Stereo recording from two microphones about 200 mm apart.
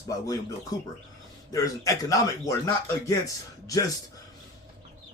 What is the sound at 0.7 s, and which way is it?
Speech, 20° left (ahead or behind).